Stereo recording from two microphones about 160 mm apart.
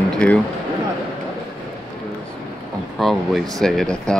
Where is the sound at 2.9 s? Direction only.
Centre (ahead or behind).